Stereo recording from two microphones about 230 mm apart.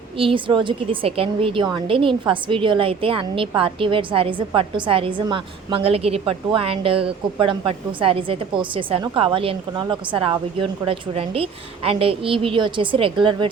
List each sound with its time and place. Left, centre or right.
0.2 s a woman's voice: right